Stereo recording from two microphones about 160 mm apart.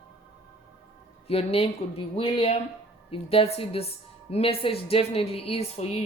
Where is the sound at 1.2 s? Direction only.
35° left (ahead or behind).